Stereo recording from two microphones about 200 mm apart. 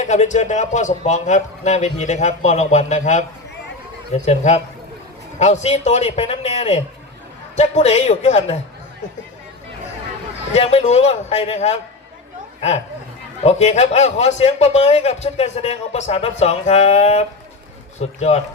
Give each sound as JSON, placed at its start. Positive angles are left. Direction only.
{"t": 0.0, "sound": "a man's voice", "side_deg": 35}
{"t": 10.5, "sound": "a man's voice", "side_deg": 30}
{"t": 13.4, "sound": "a man's voice", "side_deg": 35}